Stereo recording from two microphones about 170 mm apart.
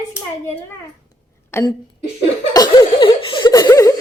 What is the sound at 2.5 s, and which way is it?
Laughter, 25° left (ahead or behind).